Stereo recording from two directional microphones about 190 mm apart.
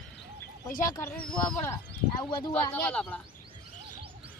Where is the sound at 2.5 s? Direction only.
5° left (ahead or behind).